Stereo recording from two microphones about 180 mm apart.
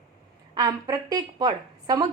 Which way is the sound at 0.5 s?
20° right (ahead or behind).